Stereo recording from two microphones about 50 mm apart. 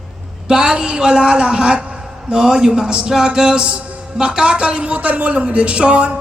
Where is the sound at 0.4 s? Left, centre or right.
Centre.